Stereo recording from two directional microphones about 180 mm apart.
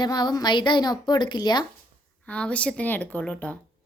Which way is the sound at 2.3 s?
5° left (ahead or behind).